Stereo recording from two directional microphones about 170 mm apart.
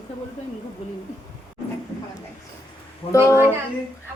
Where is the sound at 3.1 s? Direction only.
15° left (ahead or behind).